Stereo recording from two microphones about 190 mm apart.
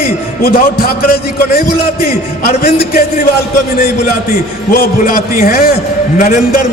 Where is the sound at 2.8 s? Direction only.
50° left (ahead or behind).